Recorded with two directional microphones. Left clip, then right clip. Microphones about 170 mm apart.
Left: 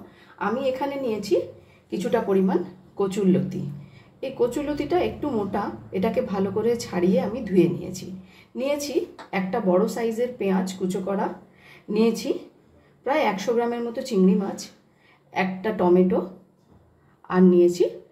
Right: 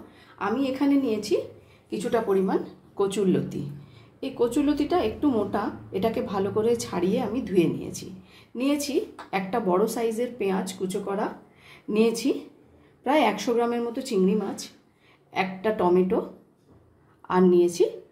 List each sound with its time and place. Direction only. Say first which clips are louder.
0.4 s a woman's voice: left 2 dB; 10° right (ahead or behind)
13.0 s a woman's voice: even; 25° right (ahead or behind)
13.6 s a woman's voice: left 1 dB; 10° right (ahead or behind)
15.3 s a woman's voice: even; 10° right (ahead or behind)
17.3 s a woman's voice: left 1 dB; 10° right (ahead or behind)